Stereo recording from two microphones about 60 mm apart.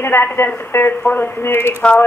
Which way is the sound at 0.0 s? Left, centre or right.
Left.